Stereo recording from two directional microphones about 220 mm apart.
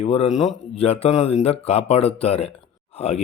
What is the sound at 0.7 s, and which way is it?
Speech, 30° left (ahead or behind).